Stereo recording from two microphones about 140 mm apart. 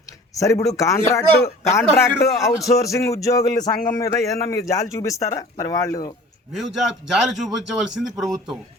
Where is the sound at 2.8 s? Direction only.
20° left (ahead or behind).